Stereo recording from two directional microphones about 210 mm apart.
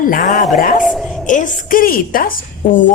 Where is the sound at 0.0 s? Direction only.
40° left (ahead or behind).